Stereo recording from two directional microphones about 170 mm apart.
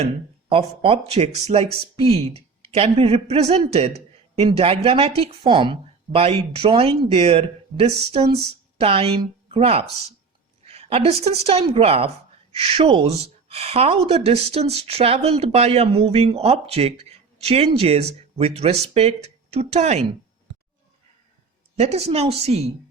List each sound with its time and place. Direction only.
0.0 s a woman's voice: 35° right (ahead or behind)
21.8 s a woman's voice: 40° right (ahead or behind)